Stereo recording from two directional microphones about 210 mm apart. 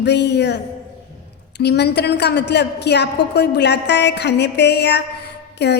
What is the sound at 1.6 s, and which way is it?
A woman's voice, 50° left (ahead or behind).